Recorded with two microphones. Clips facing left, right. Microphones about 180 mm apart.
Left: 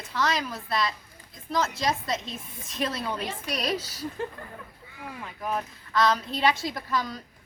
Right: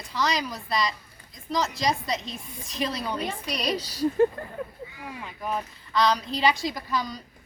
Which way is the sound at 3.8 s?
30° right (ahead or behind).